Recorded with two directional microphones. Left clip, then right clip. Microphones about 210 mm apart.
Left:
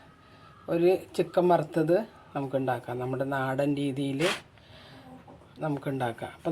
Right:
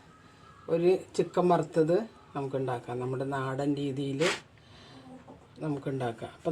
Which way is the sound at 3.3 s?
35° left (ahead or behind).